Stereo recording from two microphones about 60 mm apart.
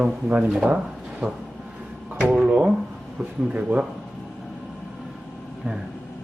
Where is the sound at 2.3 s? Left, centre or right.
Centre.